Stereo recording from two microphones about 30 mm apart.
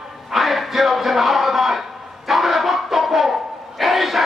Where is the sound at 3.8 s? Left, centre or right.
Centre.